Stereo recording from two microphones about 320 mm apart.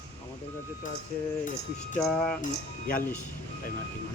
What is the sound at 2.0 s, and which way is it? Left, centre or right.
Speech, centre.